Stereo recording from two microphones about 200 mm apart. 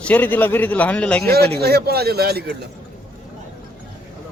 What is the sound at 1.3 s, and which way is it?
Speech, 55° right (ahead or behind).